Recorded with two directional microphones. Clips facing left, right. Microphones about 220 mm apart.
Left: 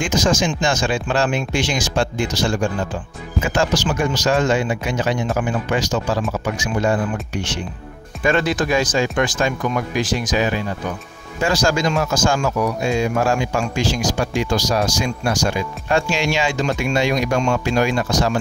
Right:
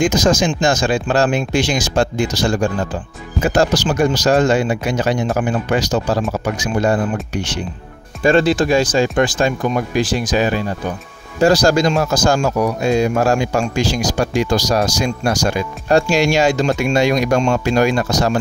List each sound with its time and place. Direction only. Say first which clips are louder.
0.0 s speech: right 4 dB; 40° right (ahead or behind)